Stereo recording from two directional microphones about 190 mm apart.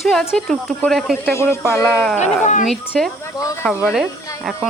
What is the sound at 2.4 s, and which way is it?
Speech, 40° left (ahead or behind).